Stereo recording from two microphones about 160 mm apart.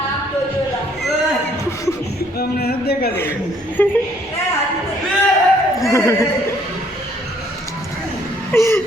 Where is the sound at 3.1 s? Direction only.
15° left (ahead or behind).